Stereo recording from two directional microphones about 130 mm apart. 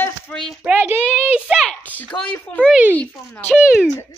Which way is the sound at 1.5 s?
Centre (ahead or behind).